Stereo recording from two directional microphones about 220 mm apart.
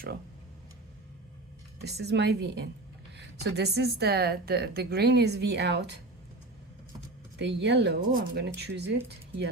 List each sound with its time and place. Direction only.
1.8 s a woman's voice: 50° right (ahead or behind)
7.3 s a woman's voice: 50° right (ahead or behind)